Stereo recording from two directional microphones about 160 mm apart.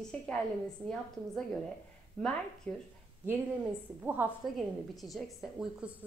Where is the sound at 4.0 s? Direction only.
10° right (ahead or behind).